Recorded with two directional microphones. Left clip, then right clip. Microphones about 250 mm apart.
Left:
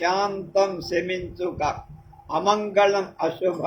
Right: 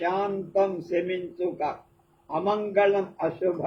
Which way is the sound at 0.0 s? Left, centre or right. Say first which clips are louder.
Left 4 dB; left.